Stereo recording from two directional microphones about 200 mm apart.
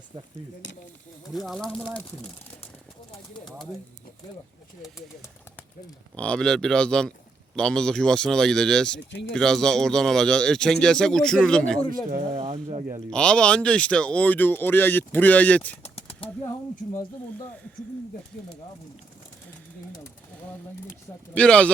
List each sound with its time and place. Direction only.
1.3 s speech: centre (ahead or behind)
6.1 s speech: 5° left (ahead or behind)
12.3 s speech: 30° right (ahead or behind)
13.1 s speech: 5° left (ahead or behind)
15.8 s bird: 30° left (ahead or behind)
21.3 s speech: 5° left (ahead or behind)